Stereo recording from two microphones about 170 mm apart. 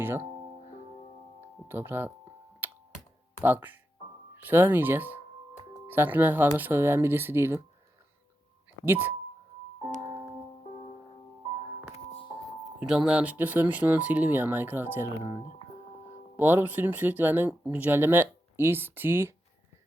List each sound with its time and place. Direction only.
1.6 s speech: 15° right (ahead or behind)
2.6 s finger snapping: 10° right (ahead or behind)
3.4 s speech: 10° right (ahead or behind)
8.8 s speech: 10° right (ahead or behind)
12.8 s speech: 5° right (ahead or behind)
16.4 s speech: 10° right (ahead or behind)